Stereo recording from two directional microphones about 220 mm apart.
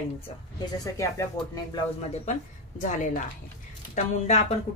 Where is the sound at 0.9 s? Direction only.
15° left (ahead or behind).